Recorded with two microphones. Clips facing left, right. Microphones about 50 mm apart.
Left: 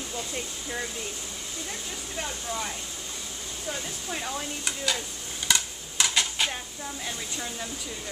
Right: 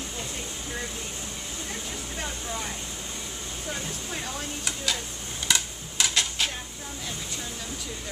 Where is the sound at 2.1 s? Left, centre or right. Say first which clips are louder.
Left 2 dB; centre.